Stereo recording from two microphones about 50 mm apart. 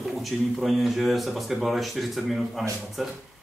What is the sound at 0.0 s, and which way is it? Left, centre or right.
Speech, centre.